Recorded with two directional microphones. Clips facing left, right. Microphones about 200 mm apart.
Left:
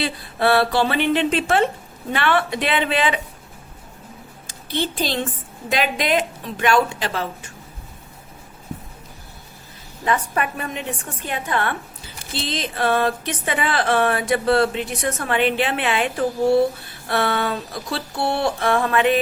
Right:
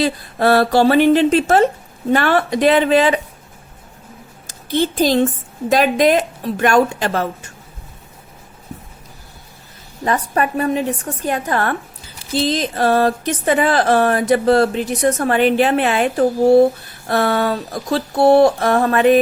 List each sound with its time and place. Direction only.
0.0 s speech: 40° right (ahead or behind)
4.4 s speech: 45° right (ahead or behind)
10.0 s speech: 40° right (ahead or behind)